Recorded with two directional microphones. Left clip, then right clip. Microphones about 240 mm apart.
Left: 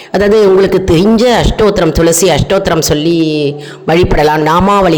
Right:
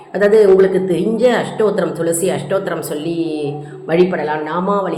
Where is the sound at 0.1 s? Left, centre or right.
Left.